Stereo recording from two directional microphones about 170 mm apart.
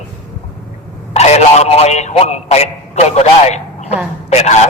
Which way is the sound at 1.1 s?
40° left (ahead or behind).